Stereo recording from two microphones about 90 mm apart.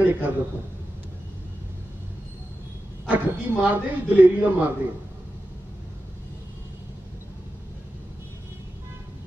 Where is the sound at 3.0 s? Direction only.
20° right (ahead or behind).